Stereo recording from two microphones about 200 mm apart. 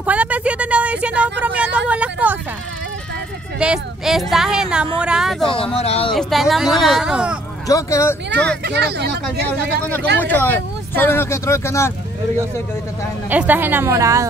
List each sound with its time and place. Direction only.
0.0 s a sound: 5° right (ahead or behind)
3.5 s speech: 5° right (ahead or behind)
5.5 s speech: 25° left (ahead or behind)
6.1 s speech: centre (ahead or behind)
7.6 s speech: 15° left (ahead or behind)
8.6 s speech: 55° right (ahead or behind)
10.2 s speech: 10° left (ahead or behind)
13.3 s a woman's voice: 10° right (ahead or behind)